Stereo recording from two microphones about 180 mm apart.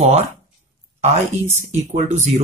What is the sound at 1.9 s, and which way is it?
Speech, 40° right (ahead or behind).